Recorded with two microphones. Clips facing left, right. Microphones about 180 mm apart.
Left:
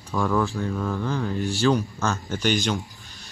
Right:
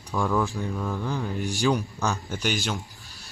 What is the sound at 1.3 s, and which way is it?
Speech, 15° right (ahead or behind).